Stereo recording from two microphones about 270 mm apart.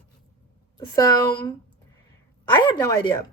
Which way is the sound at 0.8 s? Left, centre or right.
Centre.